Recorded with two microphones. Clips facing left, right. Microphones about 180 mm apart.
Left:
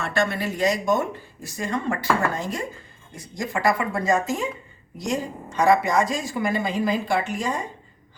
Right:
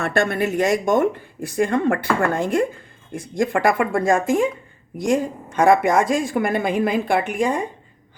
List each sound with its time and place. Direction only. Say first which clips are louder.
0.0 s speech: right 4 dB; 55° right (ahead or behind)